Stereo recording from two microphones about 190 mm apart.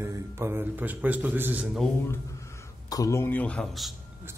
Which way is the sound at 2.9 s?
15° left (ahead or behind).